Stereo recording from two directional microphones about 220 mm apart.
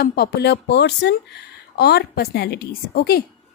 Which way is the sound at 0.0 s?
45° left (ahead or behind).